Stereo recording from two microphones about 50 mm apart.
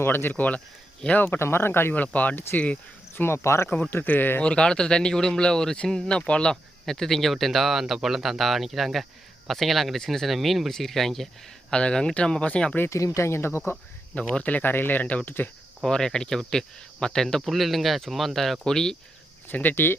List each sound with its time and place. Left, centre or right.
0.0 s speech: left
1.4 s speech: left
2.0 s speech: left
3.2 s speech: left
3.8 s speech: left
4.4 s speech: centre
11.7 s speech: centre
12.9 s speech: left
14.2 s speech: left
14.6 s speech: left
15.8 s speech: centre
19.5 s speech: left